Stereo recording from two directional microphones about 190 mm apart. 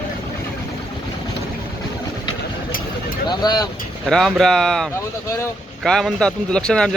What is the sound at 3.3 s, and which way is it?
Vehicle, 20° left (ahead or behind).